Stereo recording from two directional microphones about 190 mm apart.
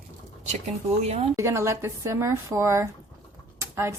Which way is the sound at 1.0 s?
35° right (ahead or behind).